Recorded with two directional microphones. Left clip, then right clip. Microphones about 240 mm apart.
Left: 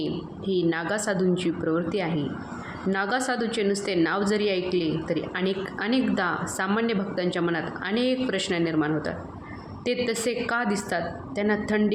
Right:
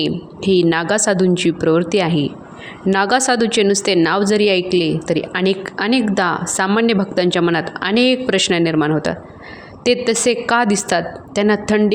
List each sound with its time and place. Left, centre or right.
0.0 s a woman's voice: right